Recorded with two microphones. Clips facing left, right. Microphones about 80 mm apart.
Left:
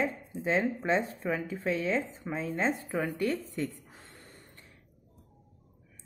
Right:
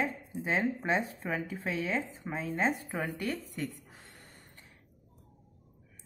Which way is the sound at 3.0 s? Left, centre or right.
Centre.